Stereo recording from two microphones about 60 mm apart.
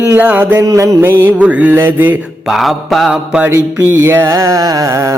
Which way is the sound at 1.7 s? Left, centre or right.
Right.